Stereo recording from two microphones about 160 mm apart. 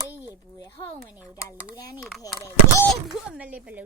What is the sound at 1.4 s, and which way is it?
Speech, 20° left (ahead or behind).